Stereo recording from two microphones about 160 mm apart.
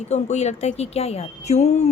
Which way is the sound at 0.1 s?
45° left (ahead or behind).